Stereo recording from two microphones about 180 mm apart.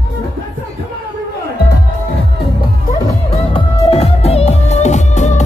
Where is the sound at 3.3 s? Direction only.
35° left (ahead or behind).